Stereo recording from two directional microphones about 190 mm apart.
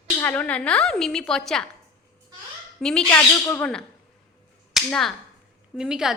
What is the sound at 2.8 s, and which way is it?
Speech, 5° left (ahead or behind).